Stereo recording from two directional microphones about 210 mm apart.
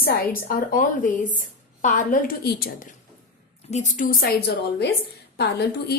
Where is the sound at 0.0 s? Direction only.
45° left (ahead or behind).